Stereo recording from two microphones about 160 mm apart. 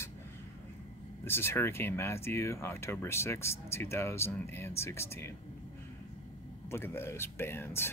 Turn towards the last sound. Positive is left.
turn(degrees=15)  # may be behind; listen again after turning